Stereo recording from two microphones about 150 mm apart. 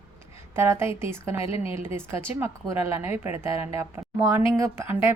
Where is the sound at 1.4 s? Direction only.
40° left (ahead or behind).